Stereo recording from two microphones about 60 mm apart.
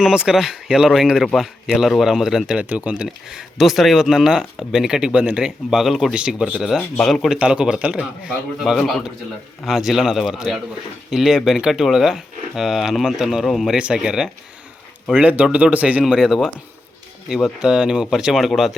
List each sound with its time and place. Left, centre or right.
0.0 s speech: centre
2.6 s speech: right
3.2 s speech: centre
6.1 s speech: centre
6.6 s speech: centre
7.3 s speech: centre
8.6 s speech: centre
13.7 s speech: centre
15.2 s speech: right
16.0 s speech: centre